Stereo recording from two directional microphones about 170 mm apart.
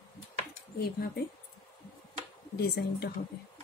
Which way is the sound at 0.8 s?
65° left (ahead or behind).